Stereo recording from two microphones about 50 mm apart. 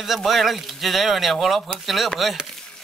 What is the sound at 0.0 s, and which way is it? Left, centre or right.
Speech, centre.